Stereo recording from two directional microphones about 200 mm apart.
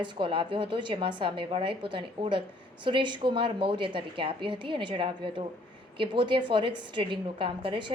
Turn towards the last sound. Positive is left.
turn(degrees=-25)  # may be behind; listen again after turning